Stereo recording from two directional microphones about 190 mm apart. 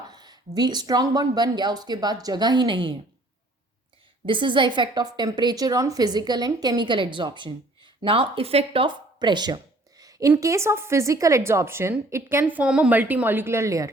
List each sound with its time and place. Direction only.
0.1 s a woman's voice: 20° right (ahead or behind)
4.3 s a woman's voice: 25° right (ahead or behind)